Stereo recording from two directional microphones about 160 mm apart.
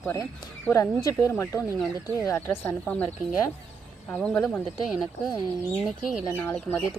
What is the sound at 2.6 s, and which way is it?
Speech, 10° left (ahead or behind).